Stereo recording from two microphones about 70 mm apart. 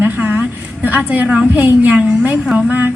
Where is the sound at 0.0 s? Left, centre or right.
Right.